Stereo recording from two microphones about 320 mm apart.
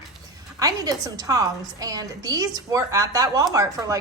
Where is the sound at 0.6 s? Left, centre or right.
Centre.